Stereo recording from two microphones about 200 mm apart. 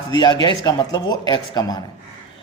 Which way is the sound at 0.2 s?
20° left (ahead or behind).